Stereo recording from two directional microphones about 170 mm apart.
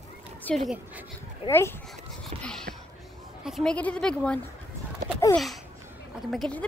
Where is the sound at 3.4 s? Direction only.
Centre (ahead or behind).